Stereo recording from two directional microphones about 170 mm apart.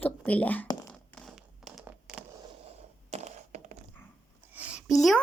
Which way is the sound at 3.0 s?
40° right (ahead or behind).